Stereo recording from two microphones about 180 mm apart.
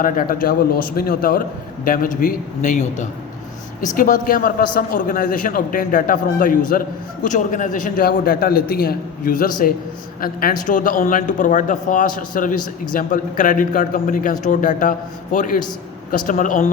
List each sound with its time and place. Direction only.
0.0 s speech: 50° left (ahead or behind)